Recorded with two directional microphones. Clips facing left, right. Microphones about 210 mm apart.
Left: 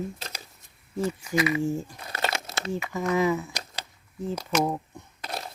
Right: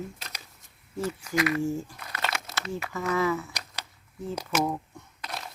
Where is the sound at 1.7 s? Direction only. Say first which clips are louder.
Left 1 dB; 20° left (ahead or behind).